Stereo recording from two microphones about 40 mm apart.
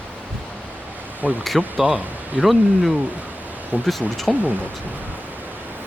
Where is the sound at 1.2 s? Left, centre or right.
Right.